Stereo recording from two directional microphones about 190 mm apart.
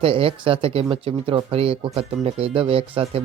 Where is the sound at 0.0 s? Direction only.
30° right (ahead or behind).